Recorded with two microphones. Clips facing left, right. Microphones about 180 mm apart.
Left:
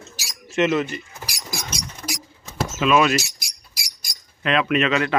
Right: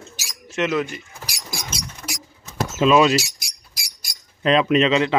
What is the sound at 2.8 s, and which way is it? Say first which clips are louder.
Speech: right 3 dB; 25° right (ahead or behind).